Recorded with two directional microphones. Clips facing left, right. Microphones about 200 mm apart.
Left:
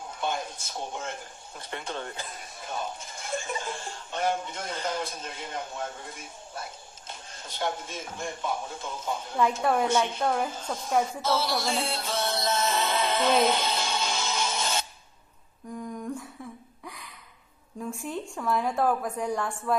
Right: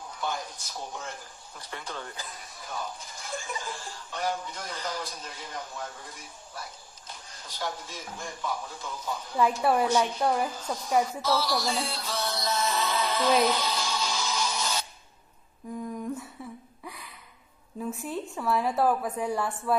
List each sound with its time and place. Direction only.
0.0 s speech: 25° left (ahead or behind)
9.6 s a woman's voice: 5° right (ahead or behind)
9.8 s speech: 25° left (ahead or behind)
10.2 s a woman's voice: 10° right (ahead or behind)
10.5 s speech: 25° left (ahead or behind)
11.1 s music: 25° left (ahead or behind)
15.7 s humming: 5° right (ahead or behind)
16.8 s a sound: centre (ahead or behind)
17.8 s a woman's voice: 5° right (ahead or behind)